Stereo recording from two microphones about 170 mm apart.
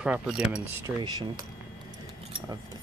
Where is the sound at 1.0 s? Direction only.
25° right (ahead or behind).